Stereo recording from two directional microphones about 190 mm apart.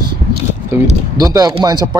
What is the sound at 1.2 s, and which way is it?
Speech, 20° right (ahead or behind).